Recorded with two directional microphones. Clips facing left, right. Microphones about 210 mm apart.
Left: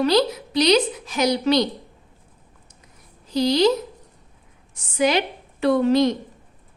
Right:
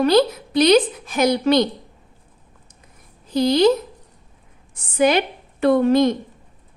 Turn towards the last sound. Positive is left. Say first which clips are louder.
# right 2 dB
turn(degrees=-50)  # may be behind; listen again after turning